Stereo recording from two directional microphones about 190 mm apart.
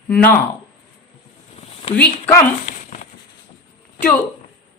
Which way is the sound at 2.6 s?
40° left (ahead or behind).